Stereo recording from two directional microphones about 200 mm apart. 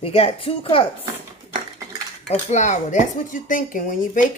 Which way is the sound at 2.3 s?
35° left (ahead or behind).